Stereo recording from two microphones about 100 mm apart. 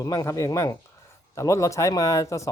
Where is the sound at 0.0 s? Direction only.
35° left (ahead or behind).